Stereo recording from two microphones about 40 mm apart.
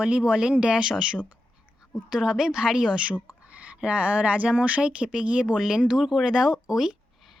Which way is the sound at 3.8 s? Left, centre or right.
Right.